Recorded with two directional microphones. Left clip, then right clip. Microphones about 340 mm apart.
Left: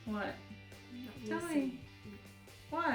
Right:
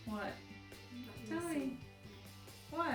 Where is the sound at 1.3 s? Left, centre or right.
Centre.